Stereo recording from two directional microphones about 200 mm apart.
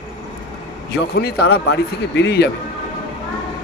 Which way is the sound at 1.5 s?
55° left (ahead or behind).